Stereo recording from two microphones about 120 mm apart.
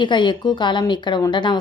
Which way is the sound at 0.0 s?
40° left (ahead or behind).